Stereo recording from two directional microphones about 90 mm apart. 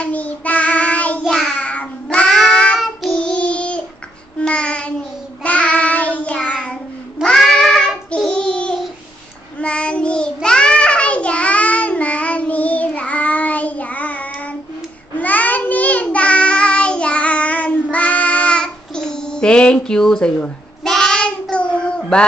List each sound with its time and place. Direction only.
0.0 s child singing: 15° left (ahead or behind)
1.2 s child singing: centre (ahead or behind)
1.6 s cat: 15° left (ahead or behind)
3.1 s child singing: 15° left (ahead or behind)
7.2 s cat: 5° left (ahead or behind)
8.1 s child singing: 10° left (ahead or behind)